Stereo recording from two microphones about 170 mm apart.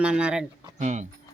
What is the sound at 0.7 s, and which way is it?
Speech, 45° right (ahead or behind).